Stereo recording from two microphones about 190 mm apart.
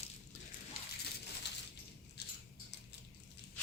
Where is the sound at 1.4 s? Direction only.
65° left (ahead or behind).